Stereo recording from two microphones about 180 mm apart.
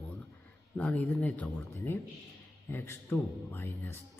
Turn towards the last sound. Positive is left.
turn(degrees=10)  # may be behind; listen again after turning